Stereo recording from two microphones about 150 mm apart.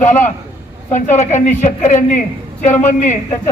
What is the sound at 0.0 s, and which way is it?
A woman's voice, 55° left (ahead or behind).